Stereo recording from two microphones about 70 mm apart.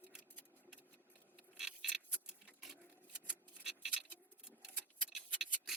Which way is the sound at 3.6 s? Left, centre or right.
Centre.